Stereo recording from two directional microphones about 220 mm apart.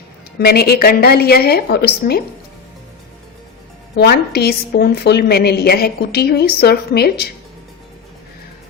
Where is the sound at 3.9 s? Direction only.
45° left (ahead or behind).